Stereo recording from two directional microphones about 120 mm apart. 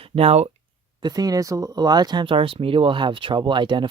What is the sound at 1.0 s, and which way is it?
Speech, 30° right (ahead or behind).